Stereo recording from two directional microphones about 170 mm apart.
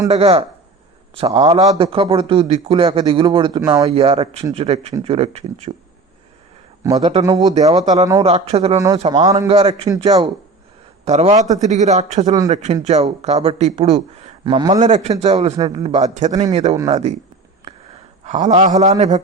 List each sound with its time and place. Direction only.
0.1 s speech: 35° right (ahead or behind)
1.6 s a man's voice: 20° right (ahead or behind)
1.9 s a man's voice: 35° right (ahead or behind)
3.8 s speech: 35° right (ahead or behind)
6.9 s speech: 35° right (ahead or behind)
7.3 s a man's voice: 25° right (ahead or behind)
7.5 s speech: 40° right (ahead or behind)
9.1 s a man's voice: 20° right (ahead or behind)
9.5 s speech: 35° right (ahead or behind)
11.0 s speech: 40° right (ahead or behind)
14.7 s a man's voice: 45° right (ahead or behind)
18.3 s a man's voice: 45° right (ahead or behind)